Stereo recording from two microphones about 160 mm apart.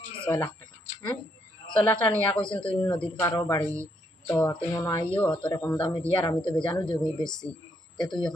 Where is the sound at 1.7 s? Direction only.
5° left (ahead or behind).